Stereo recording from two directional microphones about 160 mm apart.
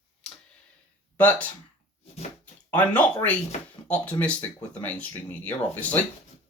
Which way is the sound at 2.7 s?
10° left (ahead or behind).